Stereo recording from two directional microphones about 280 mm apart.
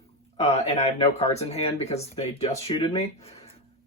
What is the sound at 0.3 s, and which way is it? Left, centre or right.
Speech, left.